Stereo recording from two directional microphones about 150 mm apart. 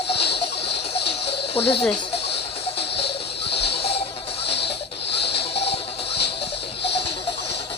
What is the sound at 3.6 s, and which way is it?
Music, 40° left (ahead or behind).